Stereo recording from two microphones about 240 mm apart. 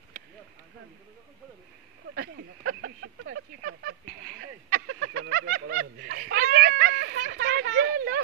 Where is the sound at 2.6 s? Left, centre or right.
Right.